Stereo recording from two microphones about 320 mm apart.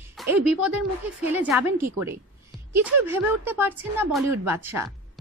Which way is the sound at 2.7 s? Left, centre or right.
Centre.